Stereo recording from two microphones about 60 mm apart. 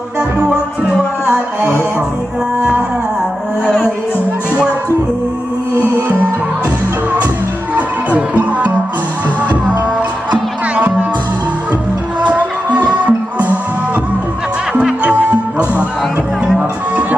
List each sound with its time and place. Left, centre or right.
0.2 s music: centre
7.8 s music: right
10.3 s music: right
12.2 s music: right
14.7 s music: centre
16.6 s music: centre